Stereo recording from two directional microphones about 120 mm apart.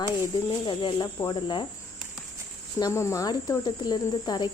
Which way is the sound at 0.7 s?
45° left (ahead or behind).